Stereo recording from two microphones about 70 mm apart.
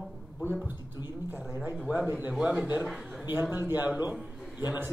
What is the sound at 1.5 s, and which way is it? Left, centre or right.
Speech, right.